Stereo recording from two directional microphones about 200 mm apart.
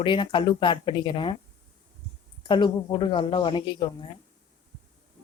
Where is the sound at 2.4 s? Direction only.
20° left (ahead or behind).